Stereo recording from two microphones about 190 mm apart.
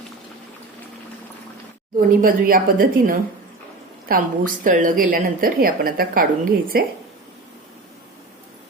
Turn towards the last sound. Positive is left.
turn(degrees=-50)  # may be behind; listen again after turning